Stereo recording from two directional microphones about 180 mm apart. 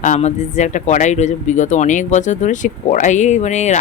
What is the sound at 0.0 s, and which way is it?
Speech, 40° left (ahead or behind).